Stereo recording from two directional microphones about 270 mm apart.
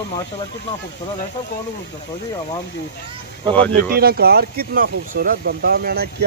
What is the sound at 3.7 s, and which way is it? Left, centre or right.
Speech, right.